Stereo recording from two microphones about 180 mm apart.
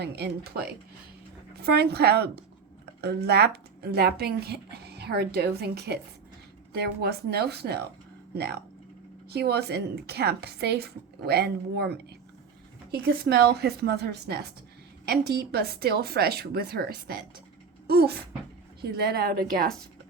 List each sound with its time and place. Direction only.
0.0 s a woman's voice: 65° right (ahead or behind)